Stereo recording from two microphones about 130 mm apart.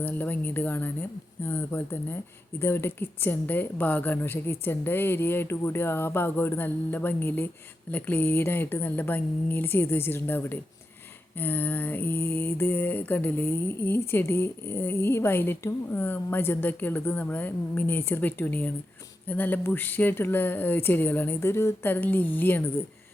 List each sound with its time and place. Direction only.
0.0 s mantra: 15° left (ahead or behind)